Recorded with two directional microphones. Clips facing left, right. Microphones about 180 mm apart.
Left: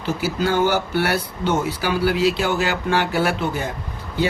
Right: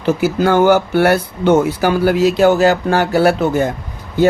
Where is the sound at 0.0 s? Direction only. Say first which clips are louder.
Right 8 dB; 50° right (ahead or behind).